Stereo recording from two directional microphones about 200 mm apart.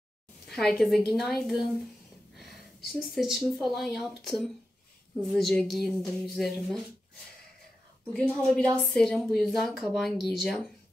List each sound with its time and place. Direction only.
0.5 s a woman's voice: centre (ahead or behind)
8.1 s a woman's voice: 5° left (ahead or behind)